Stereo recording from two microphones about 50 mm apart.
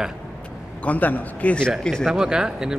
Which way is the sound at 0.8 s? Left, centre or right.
Left.